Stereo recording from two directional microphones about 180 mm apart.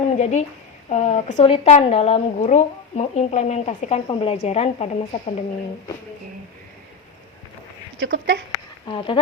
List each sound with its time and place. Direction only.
0.2 s speech: 40° left (ahead or behind)
7.9 s speech: 85° right
8.9 s speech: 30° left (ahead or behind)